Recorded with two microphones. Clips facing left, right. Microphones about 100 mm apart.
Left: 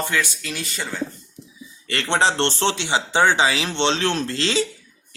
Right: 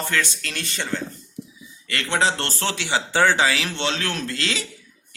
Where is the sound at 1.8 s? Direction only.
30° left (ahead or behind).